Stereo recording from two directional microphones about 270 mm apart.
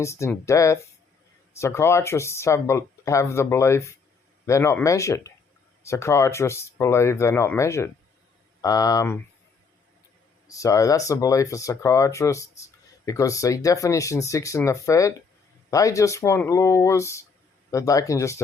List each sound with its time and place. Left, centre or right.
0.0 s speech: centre
10.5 s speech: centre